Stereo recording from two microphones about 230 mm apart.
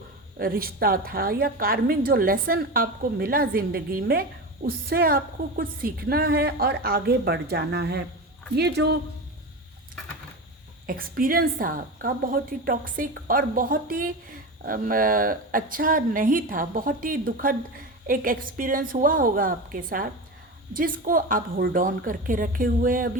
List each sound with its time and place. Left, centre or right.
0.3 s a woman's voice: right
10.8 s a woman's voice: right